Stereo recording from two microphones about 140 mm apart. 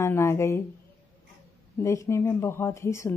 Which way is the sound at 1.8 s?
20° left (ahead or behind).